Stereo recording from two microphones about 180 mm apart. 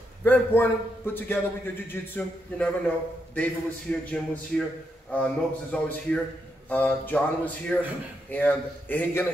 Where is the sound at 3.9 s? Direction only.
5° left (ahead or behind).